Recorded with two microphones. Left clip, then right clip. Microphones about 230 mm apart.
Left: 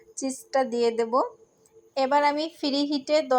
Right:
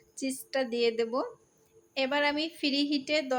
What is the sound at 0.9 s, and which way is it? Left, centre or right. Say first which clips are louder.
A woman's voice: left 7 dB; centre.